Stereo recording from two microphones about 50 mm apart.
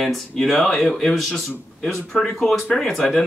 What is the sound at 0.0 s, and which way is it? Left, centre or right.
Speech, centre.